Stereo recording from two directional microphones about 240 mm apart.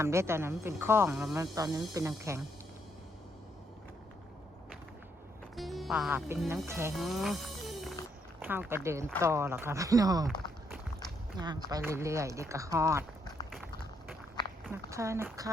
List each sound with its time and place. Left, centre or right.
0.0 s speech: centre
1.5 s speech: centre
5.5 s speech: centre
6.9 s music: centre
8.4 s speech: centre
10.2 s a sound: centre
11.3 s speech: centre
14.7 s speech: centre